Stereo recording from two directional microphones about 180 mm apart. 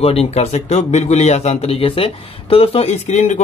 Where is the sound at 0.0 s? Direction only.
35° left (ahead or behind).